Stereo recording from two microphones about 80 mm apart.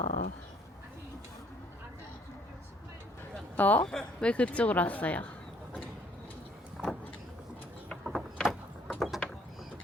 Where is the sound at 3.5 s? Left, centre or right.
Left.